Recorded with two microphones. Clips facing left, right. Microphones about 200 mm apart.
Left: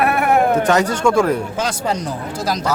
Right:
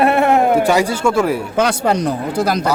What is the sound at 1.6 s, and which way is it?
Speech, 65° right (ahead or behind).